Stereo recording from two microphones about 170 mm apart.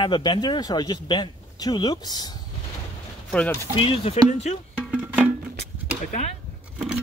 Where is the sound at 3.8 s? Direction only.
35° left (ahead or behind).